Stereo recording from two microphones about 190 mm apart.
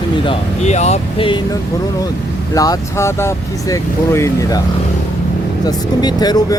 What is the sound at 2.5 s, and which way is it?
Speech, 20° left (ahead or behind).